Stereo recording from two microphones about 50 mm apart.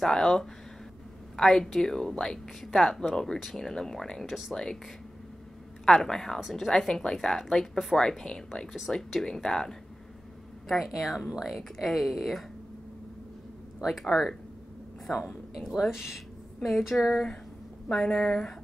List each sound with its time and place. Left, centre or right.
0.0 s speech: centre
5.9 s speech: centre
10.7 s speech: centre
13.8 s speech: centre
15.5 s speech: centre